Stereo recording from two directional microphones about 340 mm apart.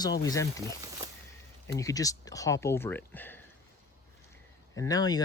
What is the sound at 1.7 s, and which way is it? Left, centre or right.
Speech, centre.